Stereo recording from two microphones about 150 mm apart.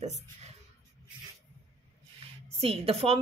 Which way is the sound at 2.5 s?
40° right (ahead or behind).